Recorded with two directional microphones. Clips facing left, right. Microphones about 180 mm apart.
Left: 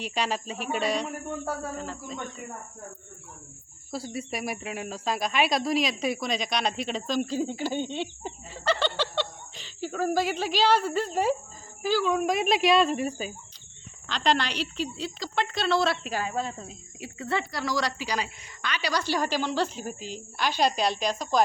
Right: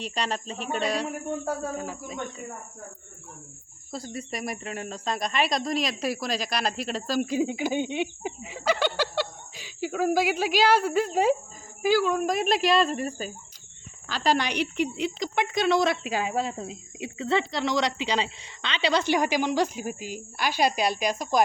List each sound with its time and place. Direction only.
0.0 s speech: centre (ahead or behind)
1.5 s speech: 10° right (ahead or behind)
3.9 s speech: 5° left (ahead or behind); by 12.1 s 10° right (ahead or behind)
12.1 s speech: centre (ahead or behind)
14.1 s speech: 10° right (ahead or behind)